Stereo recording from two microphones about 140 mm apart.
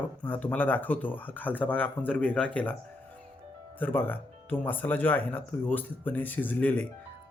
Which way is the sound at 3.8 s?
15° left (ahead or behind).